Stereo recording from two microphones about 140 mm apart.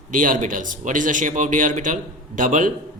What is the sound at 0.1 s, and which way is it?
A man's voice, 70° right (ahead or behind).